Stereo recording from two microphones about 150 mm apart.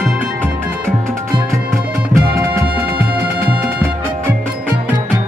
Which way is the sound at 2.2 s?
20° right (ahead or behind).